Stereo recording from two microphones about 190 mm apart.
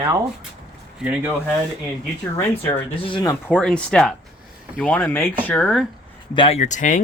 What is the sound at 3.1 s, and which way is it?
Speech, 20° left (ahead or behind).